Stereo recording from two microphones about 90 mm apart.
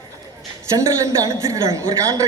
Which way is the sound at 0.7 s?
35° right (ahead or behind).